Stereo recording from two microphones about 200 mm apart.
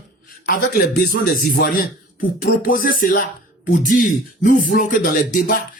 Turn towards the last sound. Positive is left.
turn(degrees=45)  # may be behind; listen again after turning